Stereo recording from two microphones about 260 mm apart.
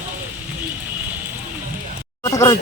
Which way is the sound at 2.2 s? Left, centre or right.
Centre.